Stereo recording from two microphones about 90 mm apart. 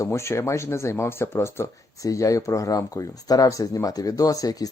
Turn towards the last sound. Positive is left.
turn(degrees=40)  # may be behind; listen again after turning